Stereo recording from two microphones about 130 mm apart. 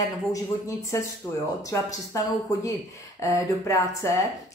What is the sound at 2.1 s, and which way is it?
Speech, 25° left (ahead or behind).